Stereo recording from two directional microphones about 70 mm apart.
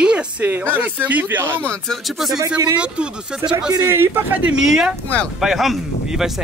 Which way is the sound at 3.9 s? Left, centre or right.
Right.